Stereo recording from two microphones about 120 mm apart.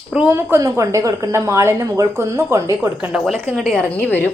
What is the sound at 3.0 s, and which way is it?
A woman's voice, 5° right (ahead or behind).